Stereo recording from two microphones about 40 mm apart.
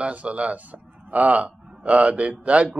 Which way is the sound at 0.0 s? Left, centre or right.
Right.